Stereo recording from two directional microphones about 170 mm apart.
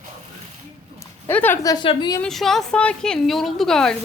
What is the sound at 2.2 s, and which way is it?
A woman's voice, centre (ahead or behind).